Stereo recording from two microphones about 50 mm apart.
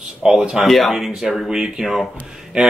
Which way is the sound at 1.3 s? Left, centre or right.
Centre.